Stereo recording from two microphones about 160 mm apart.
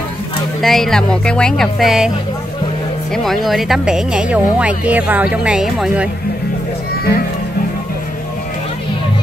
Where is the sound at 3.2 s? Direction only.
Centre (ahead or behind).